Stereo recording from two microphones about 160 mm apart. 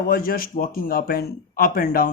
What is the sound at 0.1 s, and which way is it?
A man's voice, 65° left (ahead or behind).